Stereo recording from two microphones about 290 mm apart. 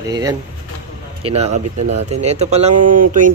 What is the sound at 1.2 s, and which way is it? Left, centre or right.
Mantra, right.